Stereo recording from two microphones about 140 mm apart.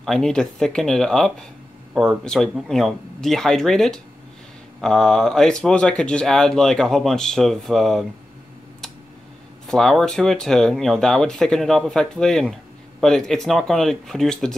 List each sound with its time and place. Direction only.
0.0 s speech: 5° left (ahead or behind)
9.7 s speech: centre (ahead or behind)